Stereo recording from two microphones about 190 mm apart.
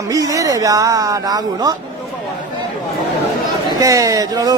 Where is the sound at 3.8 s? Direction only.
15° right (ahead or behind).